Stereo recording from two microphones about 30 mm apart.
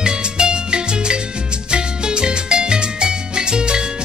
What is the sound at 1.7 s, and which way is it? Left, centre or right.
Salsa music, right.